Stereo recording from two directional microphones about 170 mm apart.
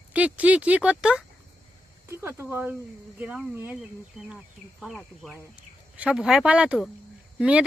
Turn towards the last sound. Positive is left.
turn(degrees=-5)  # may be behind; listen again after turning